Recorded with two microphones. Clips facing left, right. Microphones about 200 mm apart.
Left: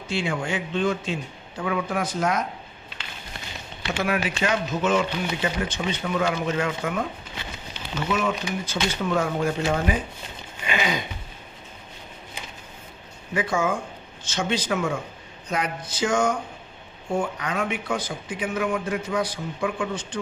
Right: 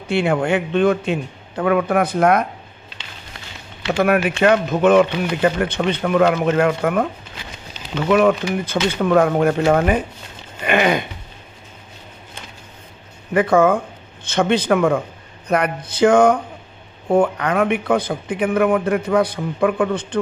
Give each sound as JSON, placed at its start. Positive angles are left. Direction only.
{"t": 0.1, "sound": "speech", "side_deg": -60}
{"t": 4.0, "sound": "speech", "side_deg": -60}
{"t": 8.1, "sound": "speech", "side_deg": -60}
{"t": 13.3, "sound": "speech", "side_deg": -60}